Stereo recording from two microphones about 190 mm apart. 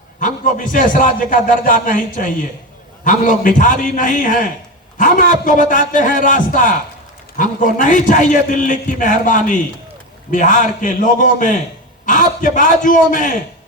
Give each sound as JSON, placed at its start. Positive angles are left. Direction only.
{"t": 0.2, "sound": "a man's voice", "side_deg": 45}